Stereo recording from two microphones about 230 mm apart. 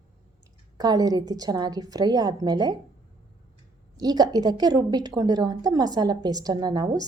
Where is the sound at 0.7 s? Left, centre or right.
Centre.